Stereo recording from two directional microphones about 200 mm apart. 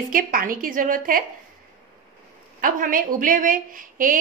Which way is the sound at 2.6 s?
45° right (ahead or behind).